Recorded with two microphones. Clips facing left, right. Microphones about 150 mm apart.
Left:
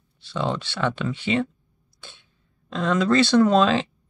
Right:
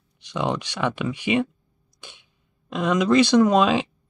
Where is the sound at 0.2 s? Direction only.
15° right (ahead or behind).